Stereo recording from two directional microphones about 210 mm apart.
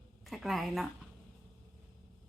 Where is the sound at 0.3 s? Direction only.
Centre (ahead or behind).